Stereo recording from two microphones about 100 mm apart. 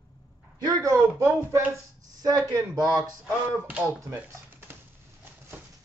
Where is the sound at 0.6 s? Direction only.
35° right (ahead or behind).